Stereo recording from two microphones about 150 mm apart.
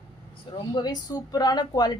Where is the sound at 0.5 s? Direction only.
30° left (ahead or behind).